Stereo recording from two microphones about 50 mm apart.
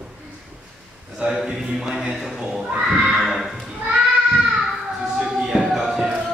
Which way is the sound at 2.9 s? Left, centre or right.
Centre.